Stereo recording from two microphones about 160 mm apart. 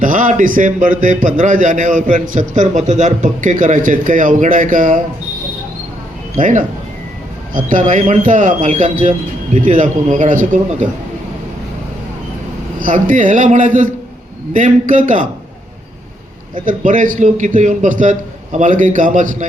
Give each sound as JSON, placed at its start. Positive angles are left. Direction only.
{"t": 0.0, "sound": "a man's voice", "side_deg": -55}
{"t": 6.3, "sound": "a man's voice", "side_deg": -55}
{"t": 12.8, "sound": "a man's voice", "side_deg": -55}
{"t": 16.6, "sound": "a man's voice", "side_deg": -55}